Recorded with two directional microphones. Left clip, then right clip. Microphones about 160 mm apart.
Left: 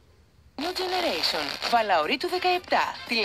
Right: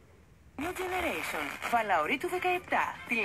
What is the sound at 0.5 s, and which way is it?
Speech, 55° left (ahead or behind).